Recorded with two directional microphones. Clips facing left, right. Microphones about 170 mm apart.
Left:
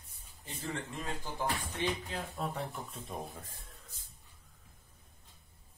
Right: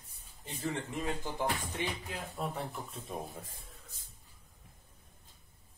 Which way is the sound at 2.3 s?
Centre (ahead or behind).